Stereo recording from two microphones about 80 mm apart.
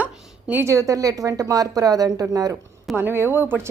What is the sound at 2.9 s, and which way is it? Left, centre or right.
Speech, right.